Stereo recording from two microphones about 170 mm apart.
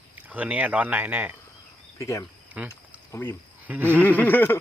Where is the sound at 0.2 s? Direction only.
10° right (ahead or behind).